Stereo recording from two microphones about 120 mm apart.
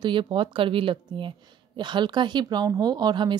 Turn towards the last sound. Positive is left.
turn(degrees=-35)  # may be behind; listen again after turning